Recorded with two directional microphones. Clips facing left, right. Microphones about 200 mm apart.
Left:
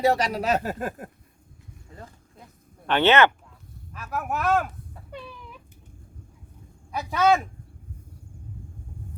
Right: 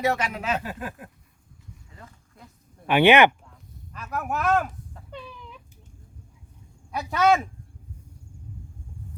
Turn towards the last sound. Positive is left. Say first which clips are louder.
# even
turn(degrees=0)  # may be behind; listen again after turning